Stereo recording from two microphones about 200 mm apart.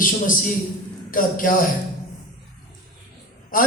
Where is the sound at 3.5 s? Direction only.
45° left (ahead or behind).